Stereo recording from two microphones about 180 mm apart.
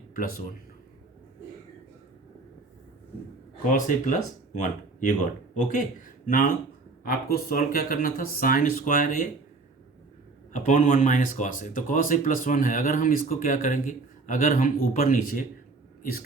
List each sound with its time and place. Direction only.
3.7 s speech: 45° left (ahead or behind)
10.5 s speech: 45° left (ahead or behind)